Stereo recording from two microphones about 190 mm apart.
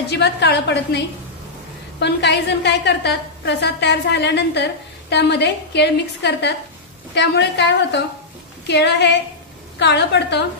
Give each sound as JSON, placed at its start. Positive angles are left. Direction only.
{"t": 0.1, "sound": "a woman's voice", "side_deg": 65}